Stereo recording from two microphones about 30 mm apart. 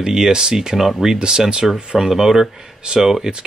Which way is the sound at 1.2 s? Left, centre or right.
Right.